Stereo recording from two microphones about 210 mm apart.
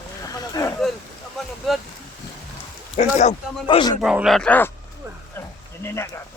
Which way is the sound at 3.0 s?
35° left (ahead or behind).